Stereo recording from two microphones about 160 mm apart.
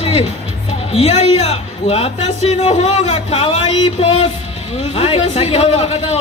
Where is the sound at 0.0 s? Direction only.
35° left (ahead or behind).